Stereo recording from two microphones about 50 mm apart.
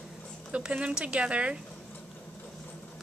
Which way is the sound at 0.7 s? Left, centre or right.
Right.